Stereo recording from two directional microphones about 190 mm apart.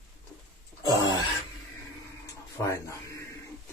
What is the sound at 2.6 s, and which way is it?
Speech, 15° left (ahead or behind).